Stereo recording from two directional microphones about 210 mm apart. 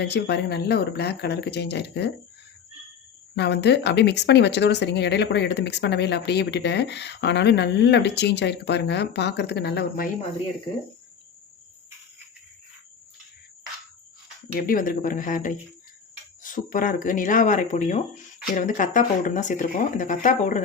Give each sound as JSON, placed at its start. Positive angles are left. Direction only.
{"t": 0.0, "sound": "speech", "side_deg": 55}
{"t": 3.3, "sound": "speech", "side_deg": 55}
{"t": 14.5, "sound": "speech", "side_deg": 40}